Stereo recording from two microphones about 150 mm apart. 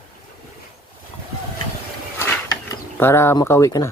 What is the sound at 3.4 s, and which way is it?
Speech, 20° left (ahead or behind).